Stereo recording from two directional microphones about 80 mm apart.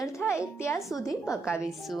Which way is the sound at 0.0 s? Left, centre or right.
Left.